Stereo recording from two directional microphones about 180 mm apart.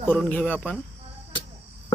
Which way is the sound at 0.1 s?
10° left (ahead or behind).